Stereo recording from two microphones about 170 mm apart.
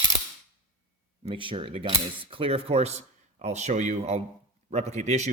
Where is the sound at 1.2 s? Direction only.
30° right (ahead or behind).